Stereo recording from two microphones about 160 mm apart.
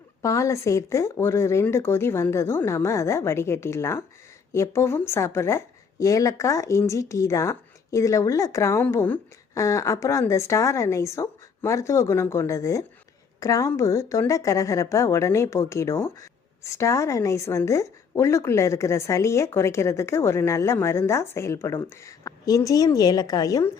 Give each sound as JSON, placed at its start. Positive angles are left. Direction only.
{"t": 0.2, "sound": "a woman's voice", "side_deg": 20}